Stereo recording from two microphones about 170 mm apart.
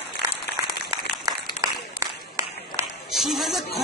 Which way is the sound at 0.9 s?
20° right (ahead or behind).